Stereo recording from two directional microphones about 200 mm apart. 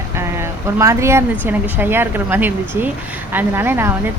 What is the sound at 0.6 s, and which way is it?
Speech, 15° right (ahead or behind).